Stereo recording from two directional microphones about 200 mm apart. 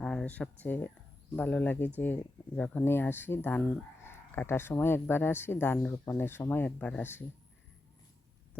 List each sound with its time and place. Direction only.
0.0 s speech: 5° left (ahead or behind)